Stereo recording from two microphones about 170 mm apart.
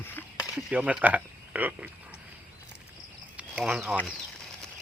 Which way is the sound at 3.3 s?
5° right (ahead or behind).